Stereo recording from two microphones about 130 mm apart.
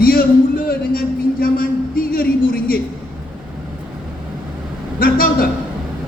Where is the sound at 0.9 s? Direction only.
90° left.